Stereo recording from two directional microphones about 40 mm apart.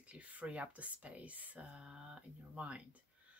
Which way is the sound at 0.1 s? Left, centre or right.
Right.